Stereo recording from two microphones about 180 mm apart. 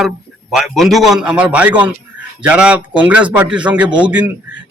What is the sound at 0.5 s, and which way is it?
A man's voice, centre (ahead or behind).